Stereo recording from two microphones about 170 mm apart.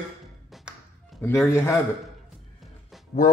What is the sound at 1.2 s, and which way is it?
Speech, 15° left (ahead or behind).